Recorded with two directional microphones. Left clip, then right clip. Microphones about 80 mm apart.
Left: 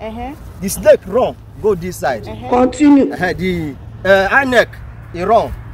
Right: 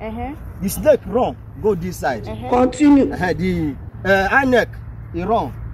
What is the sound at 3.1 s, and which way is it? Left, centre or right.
Speech, left.